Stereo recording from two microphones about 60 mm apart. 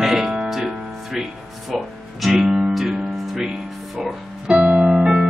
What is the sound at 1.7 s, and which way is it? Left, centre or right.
Speech, centre.